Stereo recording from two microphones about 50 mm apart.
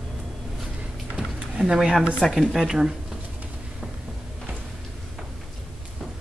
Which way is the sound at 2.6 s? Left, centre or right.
Centre.